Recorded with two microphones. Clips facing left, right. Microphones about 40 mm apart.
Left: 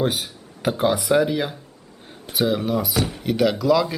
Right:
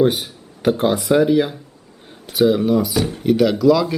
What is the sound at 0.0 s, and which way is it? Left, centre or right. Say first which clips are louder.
Speech: right 6 dB; centre.